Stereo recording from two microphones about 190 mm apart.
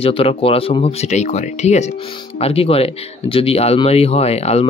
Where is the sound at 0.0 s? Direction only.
30° left (ahead or behind).